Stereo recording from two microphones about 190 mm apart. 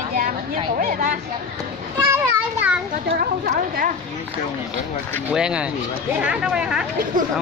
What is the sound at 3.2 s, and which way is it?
Speech, 50° right (ahead or behind).